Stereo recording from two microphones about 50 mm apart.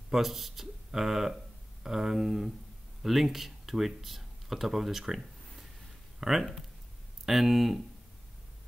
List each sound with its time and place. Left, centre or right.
0.1 s speech: centre